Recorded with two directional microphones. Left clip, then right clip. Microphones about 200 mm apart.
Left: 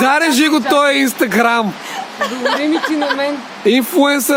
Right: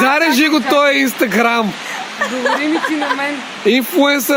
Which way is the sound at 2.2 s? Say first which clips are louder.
Even; 55° left (ahead or behind).